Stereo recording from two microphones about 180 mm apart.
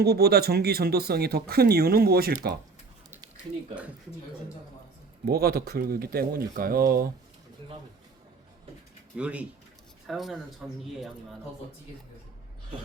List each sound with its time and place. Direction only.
0.0 s speech: 60° right (ahead or behind)
5.2 s speech: 60° right (ahead or behind)
9.1 s speech: 5° right (ahead or behind)